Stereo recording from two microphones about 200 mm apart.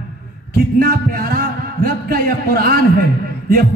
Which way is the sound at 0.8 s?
50° right (ahead or behind).